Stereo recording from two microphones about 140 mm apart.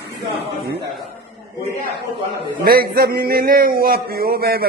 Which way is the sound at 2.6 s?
90° right.